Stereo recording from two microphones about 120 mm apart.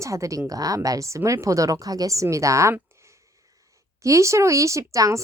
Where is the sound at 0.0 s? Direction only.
25° right (ahead or behind).